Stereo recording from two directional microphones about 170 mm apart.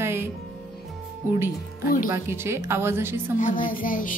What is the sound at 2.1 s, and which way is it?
Speech, 15° right (ahead or behind).